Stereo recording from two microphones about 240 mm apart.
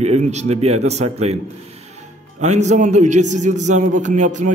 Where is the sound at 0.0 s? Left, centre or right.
Right.